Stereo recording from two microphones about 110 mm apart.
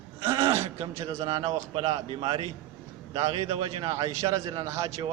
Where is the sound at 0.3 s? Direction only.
25° right (ahead or behind).